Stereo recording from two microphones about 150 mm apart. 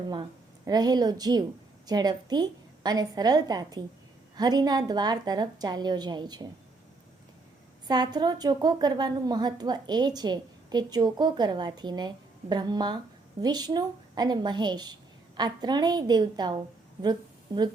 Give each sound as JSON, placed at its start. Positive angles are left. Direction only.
{"t": 0.1, "sound": "a woman's voice", "side_deg": -30}
{"t": 7.9, "sound": "a woman's voice", "side_deg": -25}